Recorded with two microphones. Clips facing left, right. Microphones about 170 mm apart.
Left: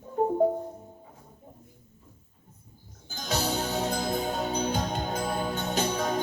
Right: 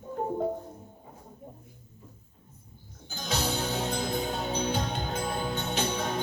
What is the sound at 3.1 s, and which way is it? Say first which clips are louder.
Music: left 2 dB; 40° left (ahead or behind).